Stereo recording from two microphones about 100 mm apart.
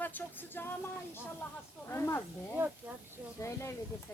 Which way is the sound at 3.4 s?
30° left (ahead or behind).